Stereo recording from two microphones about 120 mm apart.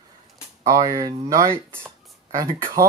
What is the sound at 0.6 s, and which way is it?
Speech, 30° right (ahead or behind).